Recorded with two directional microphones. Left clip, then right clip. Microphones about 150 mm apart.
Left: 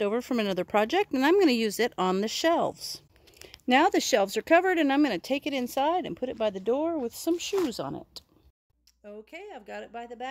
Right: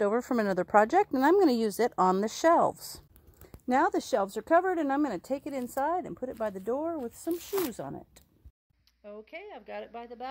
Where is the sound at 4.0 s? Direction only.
30° left (ahead or behind).